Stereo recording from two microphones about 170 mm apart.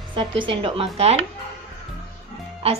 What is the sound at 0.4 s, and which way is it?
Speech, 30° right (ahead or behind).